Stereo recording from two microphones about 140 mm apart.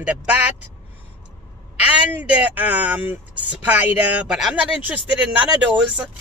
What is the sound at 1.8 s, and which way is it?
Speech, 10° right (ahead or behind).